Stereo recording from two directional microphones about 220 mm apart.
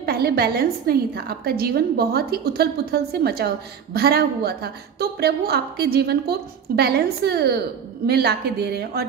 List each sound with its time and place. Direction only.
0.0 s a woman's voice: 45° right (ahead or behind)